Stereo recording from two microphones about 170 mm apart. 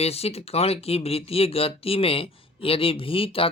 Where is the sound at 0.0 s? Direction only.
35° left (ahead or behind).